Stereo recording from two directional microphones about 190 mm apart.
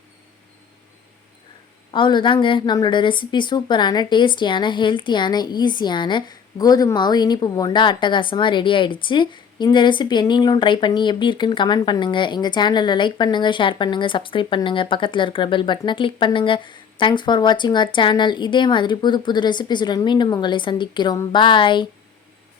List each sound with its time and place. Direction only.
1.9 s a woman's voice: 25° left (ahead or behind)